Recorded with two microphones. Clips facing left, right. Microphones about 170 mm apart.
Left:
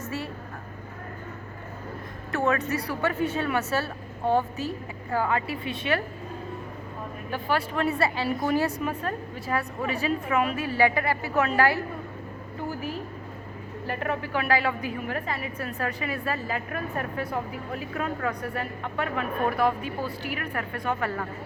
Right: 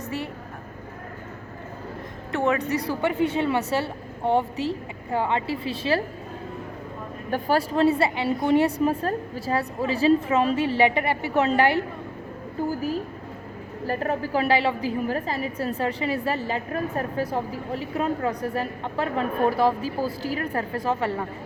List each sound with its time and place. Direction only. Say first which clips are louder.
0.0 s vehicle: right 2 dB; 20° right (ahead or behind)
2.3 s a woman's voice: right 2 dB; 20° right (ahead or behind)
7.3 s a woman's voice: right 5 dB; 45° right (ahead or behind); by 11.8 s 25° right (ahead or behind)
13.8 s a woman's voice: right 4 dB; 35° right (ahead or behind)